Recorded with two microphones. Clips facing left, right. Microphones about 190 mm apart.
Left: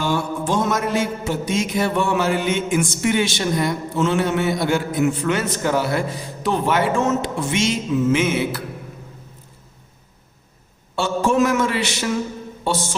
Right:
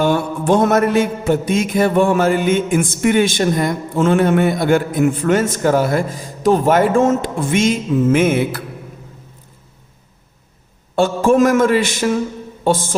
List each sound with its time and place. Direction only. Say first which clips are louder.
0.0 s mantra: right 6 dB; 60° right (ahead or behind)
10.9 s mantra: right 5 dB; 50° right (ahead or behind)